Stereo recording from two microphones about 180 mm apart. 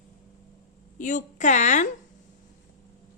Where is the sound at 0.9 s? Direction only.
45° left (ahead or behind).